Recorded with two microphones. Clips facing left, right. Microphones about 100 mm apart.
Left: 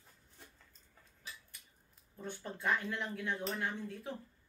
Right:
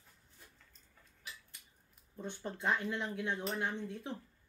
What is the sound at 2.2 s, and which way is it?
Speech, 20° right (ahead or behind).